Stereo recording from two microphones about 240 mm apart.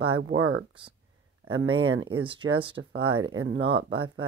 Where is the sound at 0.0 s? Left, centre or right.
Right.